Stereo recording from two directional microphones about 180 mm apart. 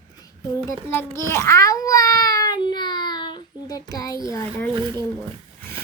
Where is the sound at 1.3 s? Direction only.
15° left (ahead or behind).